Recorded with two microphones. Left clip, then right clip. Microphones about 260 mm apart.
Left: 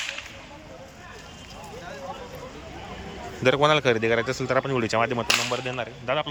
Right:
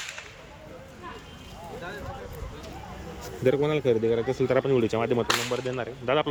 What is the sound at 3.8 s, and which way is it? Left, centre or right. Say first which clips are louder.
Speech: left 2 dB; left.